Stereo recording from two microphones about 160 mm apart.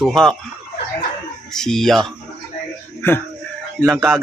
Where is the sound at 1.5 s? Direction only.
Centre (ahead or behind).